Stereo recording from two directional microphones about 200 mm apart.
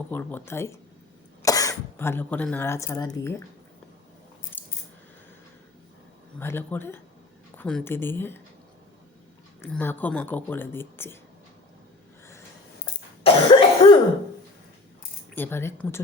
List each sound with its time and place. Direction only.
0.1 s speech: 10° left (ahead or behind)
4.5 s scissors: 10° left (ahead or behind)
6.4 s speech: 10° left (ahead or behind)
9.6 s speech: 10° left (ahead or behind)
13.2 s cough: 25° left (ahead or behind)
15.4 s speech: 10° left (ahead or behind)